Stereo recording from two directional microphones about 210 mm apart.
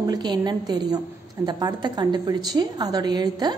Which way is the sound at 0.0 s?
20° right (ahead or behind).